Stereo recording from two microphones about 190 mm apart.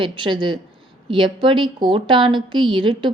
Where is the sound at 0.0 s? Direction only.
25° right (ahead or behind).